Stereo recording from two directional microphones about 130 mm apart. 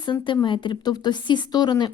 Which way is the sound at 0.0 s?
40° left (ahead or behind).